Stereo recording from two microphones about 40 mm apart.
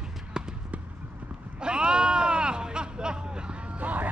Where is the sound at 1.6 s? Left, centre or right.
Right.